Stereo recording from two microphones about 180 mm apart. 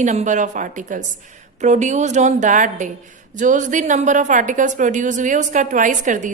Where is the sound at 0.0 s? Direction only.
40° right (ahead or behind).